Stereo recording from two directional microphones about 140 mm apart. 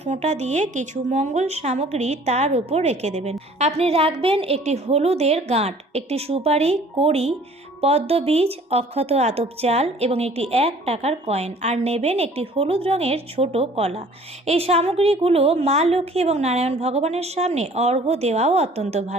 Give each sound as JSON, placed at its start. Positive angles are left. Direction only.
{"t": 0.0, "sound": "speech", "side_deg": -55}